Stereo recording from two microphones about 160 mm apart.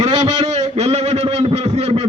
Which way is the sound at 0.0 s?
45° right (ahead or behind).